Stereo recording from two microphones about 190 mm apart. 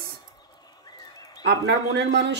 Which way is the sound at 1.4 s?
65° right (ahead or behind).